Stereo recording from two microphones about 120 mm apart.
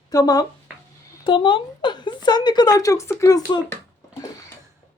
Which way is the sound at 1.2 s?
45° left (ahead or behind).